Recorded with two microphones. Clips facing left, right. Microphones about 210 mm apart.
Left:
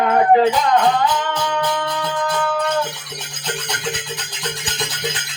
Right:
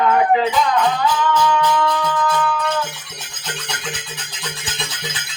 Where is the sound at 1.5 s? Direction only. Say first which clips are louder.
Right 4 dB; 50° left (ahead or behind).